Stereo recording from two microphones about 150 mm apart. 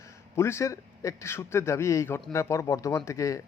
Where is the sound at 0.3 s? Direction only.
20° left (ahead or behind).